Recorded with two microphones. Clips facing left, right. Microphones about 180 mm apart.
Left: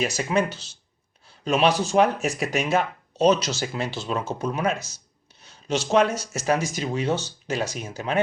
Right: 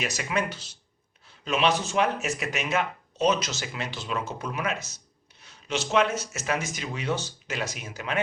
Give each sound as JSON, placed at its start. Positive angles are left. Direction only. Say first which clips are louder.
{"t": 0.0, "sound": "speech", "louder": "left 5 dB", "side_deg": 35}
{"t": 5.9, "sound": "speech", "louder": "left 4 dB", "side_deg": 40}